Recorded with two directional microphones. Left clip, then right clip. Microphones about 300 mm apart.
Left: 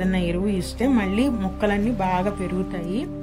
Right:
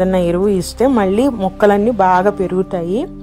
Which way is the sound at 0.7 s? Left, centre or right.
Right.